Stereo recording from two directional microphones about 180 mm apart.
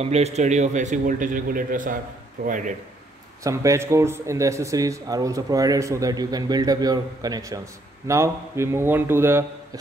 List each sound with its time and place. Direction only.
0.0 s a man's voice: 35° right (ahead or behind)
3.4 s speech: 15° right (ahead or behind)